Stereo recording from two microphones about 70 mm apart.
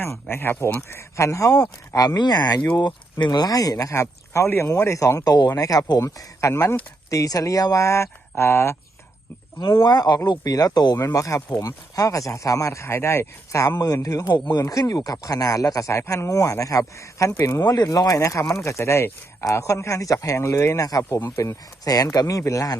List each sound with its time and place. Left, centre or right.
0.0 s speech: left
2.0 s speech: left
2.7 s speech: left
9.8 s speech: left
10.2 s speech: left
11.0 s speech: left
21.1 s speech: left
21.8 s speech: left